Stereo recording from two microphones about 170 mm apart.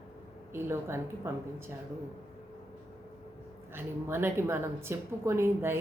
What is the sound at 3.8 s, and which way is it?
A woman's voice, 15° right (ahead or behind).